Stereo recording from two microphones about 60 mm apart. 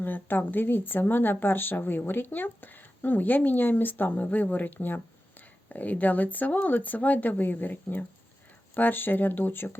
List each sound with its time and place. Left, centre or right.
0.0 s speech: left